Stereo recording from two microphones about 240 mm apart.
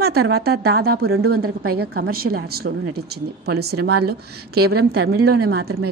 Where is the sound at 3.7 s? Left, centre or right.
Right.